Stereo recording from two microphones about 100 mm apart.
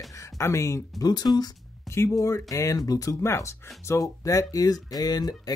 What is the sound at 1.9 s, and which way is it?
Speech, 25° left (ahead or behind).